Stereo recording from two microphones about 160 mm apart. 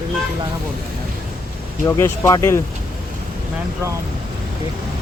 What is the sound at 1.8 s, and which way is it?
Speech, 20° left (ahead or behind).